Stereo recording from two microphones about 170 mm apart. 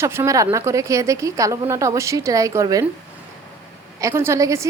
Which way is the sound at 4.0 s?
15° right (ahead or behind).